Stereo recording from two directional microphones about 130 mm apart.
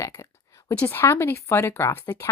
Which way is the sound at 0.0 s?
20° left (ahead or behind).